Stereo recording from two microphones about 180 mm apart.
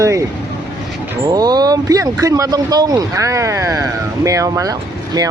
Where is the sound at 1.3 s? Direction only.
20° right (ahead or behind).